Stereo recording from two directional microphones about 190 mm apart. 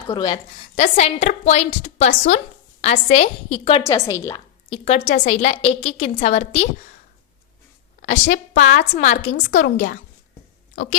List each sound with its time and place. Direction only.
0.1 s a woman's voice: 25° left (ahead or behind)
3.8 s a woman's voice: 15° left (ahead or behind)
4.7 s a woman's voice: 35° left (ahead or behind)
8.0 s a woman's voice: 40° left (ahead or behind)